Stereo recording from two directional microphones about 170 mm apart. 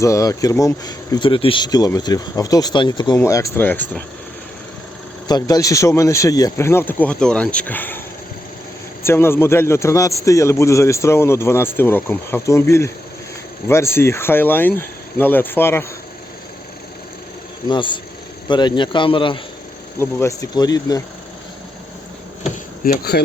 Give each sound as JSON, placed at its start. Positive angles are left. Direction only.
{"t": 0.0, "sound": "a man's voice", "side_deg": 20}
{"t": 5.3, "sound": "a man's voice", "side_deg": 20}
{"t": 9.0, "sound": "a man's voice", "side_deg": 15}
{"t": 17.7, "sound": "speech", "side_deg": 30}
{"t": 20.0, "sound": "speech", "side_deg": 15}
{"t": 22.4, "sound": "a sound", "side_deg": 65}